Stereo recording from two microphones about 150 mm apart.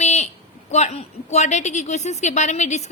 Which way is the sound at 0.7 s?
50° left (ahead or behind).